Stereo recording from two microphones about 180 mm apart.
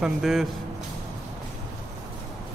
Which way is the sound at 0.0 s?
Centre (ahead or behind).